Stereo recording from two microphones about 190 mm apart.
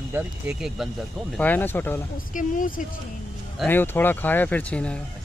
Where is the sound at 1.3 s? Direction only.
10° left (ahead or behind).